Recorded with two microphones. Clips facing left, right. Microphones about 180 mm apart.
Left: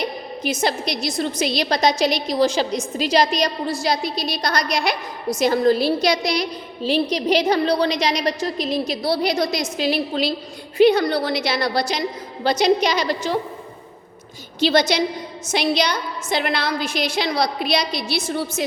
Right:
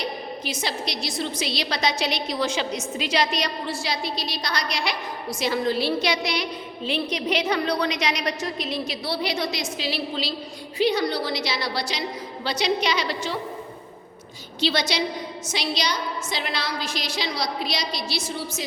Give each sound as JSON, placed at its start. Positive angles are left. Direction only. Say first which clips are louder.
{"t": 0.4, "sound": "a woman's voice", "louder": "left 9 dB", "side_deg": 50}
{"t": 14.6, "sound": "a woman's voice", "louder": "left 6 dB", "side_deg": 50}